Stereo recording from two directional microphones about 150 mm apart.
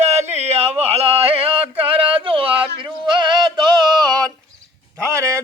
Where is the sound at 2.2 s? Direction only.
35° right (ahead or behind).